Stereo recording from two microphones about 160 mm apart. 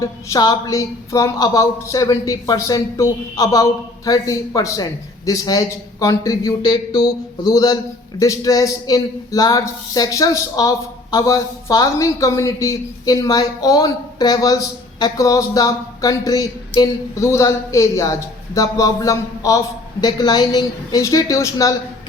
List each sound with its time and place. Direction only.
0.0 s speech: 20° left (ahead or behind)